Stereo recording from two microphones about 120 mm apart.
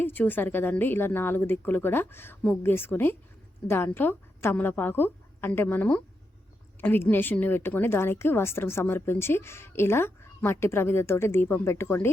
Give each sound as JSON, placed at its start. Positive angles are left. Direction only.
{"t": 0.0, "sound": "a woman's voice", "side_deg": 15}